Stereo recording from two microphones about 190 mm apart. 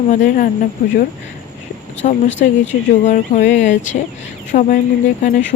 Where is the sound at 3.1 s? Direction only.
40° left (ahead or behind).